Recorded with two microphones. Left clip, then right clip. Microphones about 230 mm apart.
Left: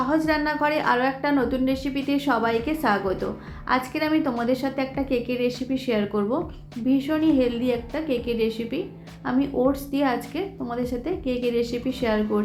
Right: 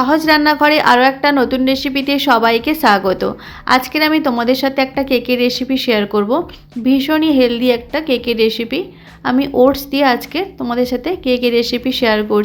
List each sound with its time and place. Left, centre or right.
0.0 s a woman's voice: right